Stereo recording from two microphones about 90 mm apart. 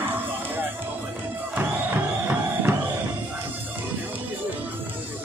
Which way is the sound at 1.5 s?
20° right (ahead or behind).